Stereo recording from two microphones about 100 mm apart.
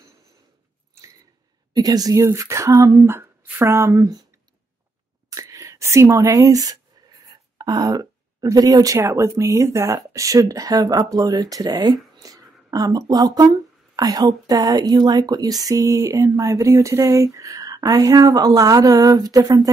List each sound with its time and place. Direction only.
1.7 s speech: 40° right (ahead or behind)
5.3 s a woman's voice: 35° right (ahead or behind)
12.2 s a sound: 35° right (ahead or behind)
12.7 s a woman's voice: 40° right (ahead or behind)